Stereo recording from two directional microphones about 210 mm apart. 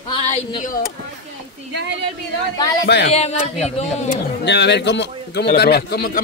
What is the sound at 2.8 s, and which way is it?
Speech, 55° left (ahead or behind).